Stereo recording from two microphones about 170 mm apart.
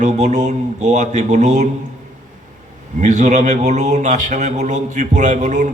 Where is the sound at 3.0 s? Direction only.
45° right (ahead or behind).